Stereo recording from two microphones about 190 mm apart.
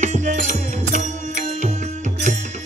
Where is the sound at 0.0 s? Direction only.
40° right (ahead or behind).